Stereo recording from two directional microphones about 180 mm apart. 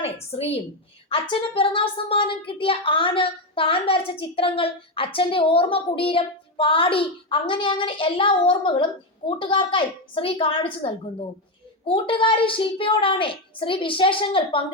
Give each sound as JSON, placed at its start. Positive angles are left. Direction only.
{"t": 0.0, "sound": "a woman's voice", "side_deg": 35}